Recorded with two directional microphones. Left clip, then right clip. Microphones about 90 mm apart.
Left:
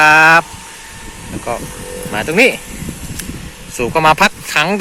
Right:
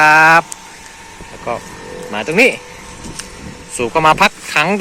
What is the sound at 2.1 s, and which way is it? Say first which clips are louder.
Speech: even; 15° left (ahead or behind).